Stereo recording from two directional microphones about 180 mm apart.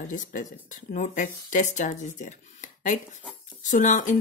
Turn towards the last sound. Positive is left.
turn(degrees=45)  # may be behind; listen again after turning